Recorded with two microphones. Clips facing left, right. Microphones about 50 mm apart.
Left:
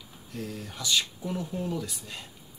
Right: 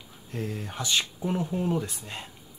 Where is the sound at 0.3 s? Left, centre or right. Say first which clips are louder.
Right 3 dB; right.